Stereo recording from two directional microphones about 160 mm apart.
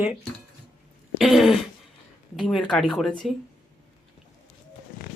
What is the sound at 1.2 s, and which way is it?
Speech, centre (ahead or behind).